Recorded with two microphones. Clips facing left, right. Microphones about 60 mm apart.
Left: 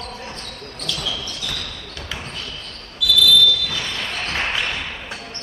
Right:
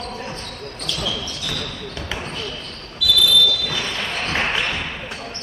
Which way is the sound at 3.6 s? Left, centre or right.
Centre.